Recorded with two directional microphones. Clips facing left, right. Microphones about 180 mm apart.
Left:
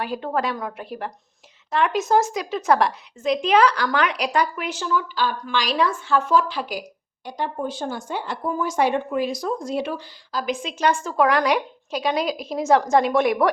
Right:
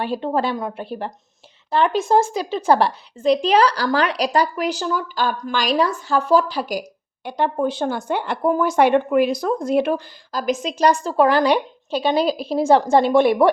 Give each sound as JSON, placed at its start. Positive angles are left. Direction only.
{"t": 0.0, "sound": "speech", "side_deg": -25}
{"t": 7.3, "sound": "speech", "side_deg": -65}